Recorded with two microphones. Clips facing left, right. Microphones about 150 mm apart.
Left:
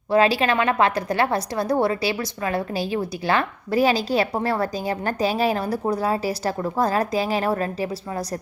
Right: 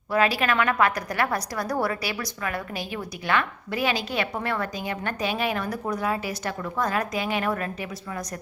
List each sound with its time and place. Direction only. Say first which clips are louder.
0.1 s a woman's voice: left 4 dB; 30° left (ahead or behind)